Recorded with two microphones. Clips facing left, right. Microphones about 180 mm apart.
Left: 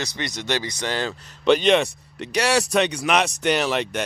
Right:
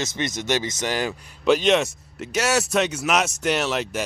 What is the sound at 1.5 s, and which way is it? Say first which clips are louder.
Speech: left 1 dB; centre (ahead or behind).